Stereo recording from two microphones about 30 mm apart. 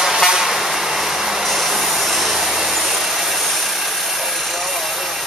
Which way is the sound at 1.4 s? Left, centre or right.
Centre.